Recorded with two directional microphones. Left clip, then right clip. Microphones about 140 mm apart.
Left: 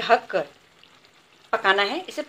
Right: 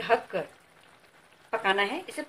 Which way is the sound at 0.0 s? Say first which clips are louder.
Left 6 dB; 15° left (ahead or behind).